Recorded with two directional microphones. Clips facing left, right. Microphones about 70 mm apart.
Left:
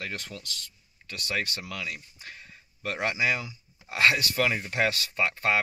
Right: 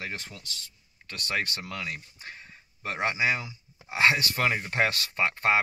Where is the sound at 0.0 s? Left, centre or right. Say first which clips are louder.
Left 1 dB; right.